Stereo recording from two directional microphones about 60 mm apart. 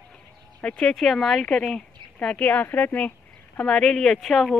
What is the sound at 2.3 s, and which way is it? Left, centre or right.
Speech, left.